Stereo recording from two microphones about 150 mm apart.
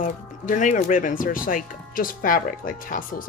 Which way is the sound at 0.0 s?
55° left (ahead or behind).